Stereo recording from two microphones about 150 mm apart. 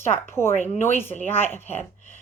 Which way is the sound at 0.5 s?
50° left (ahead or behind).